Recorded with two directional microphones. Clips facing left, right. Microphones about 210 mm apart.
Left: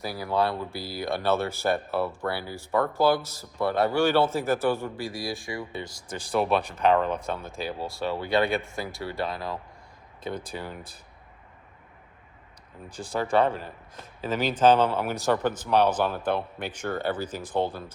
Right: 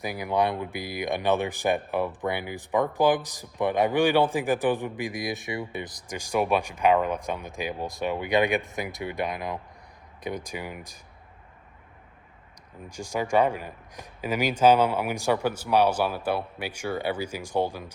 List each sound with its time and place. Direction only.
0.0 s speech: 15° right (ahead or behind)
12.9 s speech: 10° right (ahead or behind)